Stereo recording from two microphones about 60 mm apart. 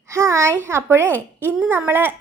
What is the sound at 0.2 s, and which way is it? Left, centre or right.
A woman's voice, right.